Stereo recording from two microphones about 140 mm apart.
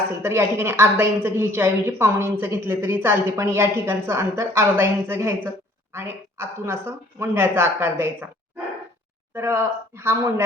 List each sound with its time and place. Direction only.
0.2 s a woman's voice: 20° right (ahead or behind)
9.3 s a woman's voice: 20° right (ahead or behind)